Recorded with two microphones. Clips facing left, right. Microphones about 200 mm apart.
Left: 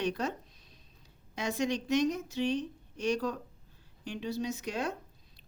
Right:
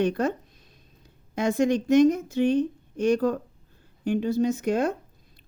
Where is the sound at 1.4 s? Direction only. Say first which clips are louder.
Right 9 dB; 50° right (ahead or behind).